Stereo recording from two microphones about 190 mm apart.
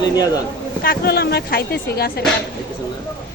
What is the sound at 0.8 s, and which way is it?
Speech, 55° left (ahead or behind).